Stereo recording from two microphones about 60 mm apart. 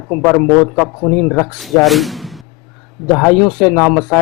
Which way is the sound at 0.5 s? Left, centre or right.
Left.